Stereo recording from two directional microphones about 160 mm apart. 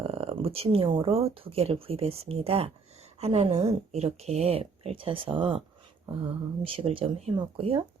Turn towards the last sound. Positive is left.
turn(degrees=-35)  # may be behind; listen again after turning